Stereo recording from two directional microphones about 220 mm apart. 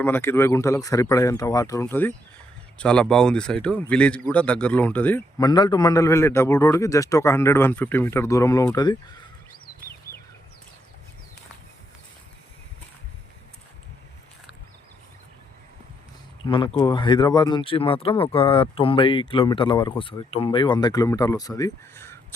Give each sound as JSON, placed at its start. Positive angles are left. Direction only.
{"t": 0.0, "sound": "speech", "side_deg": 10}
{"t": 16.5, "sound": "speech", "side_deg": 20}